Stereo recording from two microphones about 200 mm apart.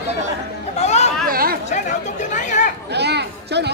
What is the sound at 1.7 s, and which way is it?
Chatter, 40° left (ahead or behind).